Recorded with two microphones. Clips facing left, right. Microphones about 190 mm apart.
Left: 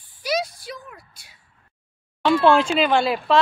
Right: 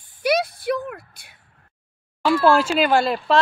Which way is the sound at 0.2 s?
60° right (ahead or behind).